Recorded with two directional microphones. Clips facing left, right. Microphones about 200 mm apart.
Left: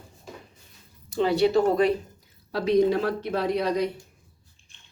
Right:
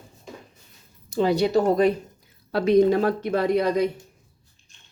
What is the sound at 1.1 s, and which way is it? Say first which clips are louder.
Speech: right 1 dB; 40° right (ahead or behind).